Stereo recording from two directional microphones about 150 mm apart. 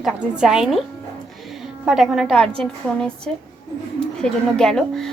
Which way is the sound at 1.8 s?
5° right (ahead or behind).